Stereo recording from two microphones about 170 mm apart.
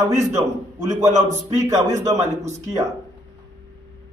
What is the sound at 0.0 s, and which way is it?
Speech, 15° right (ahead or behind).